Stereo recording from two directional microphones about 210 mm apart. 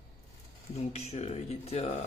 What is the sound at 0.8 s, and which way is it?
Speech, 30° left (ahead or behind).